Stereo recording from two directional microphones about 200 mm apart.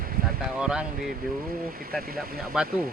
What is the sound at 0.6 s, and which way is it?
Speech, 5° right (ahead or behind).